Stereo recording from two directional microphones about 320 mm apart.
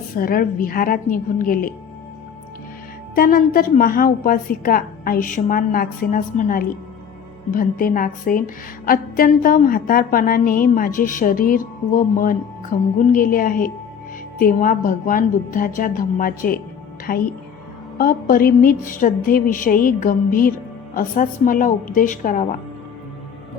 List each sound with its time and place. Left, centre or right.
0.2 s a woman's voice: left
3.2 s a woman's voice: left